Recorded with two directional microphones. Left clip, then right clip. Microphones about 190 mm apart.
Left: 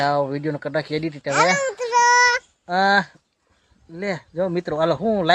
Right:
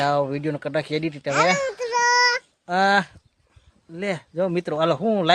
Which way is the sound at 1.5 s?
15° left (ahead or behind).